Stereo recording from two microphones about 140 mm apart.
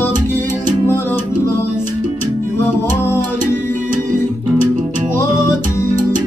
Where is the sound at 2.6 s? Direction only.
20° left (ahead or behind).